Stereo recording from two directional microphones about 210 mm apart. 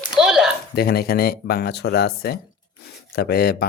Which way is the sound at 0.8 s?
50° left (ahead or behind).